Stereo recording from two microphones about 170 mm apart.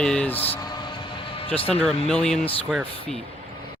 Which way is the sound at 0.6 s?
25° left (ahead or behind).